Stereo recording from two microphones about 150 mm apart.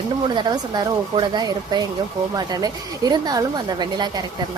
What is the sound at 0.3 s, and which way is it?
A woman's voice, 30° right (ahead or behind).